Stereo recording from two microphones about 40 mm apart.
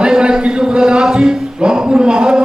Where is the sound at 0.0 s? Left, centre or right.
Right.